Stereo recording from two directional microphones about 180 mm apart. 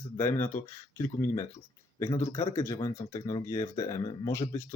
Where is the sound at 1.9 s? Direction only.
15° left (ahead or behind).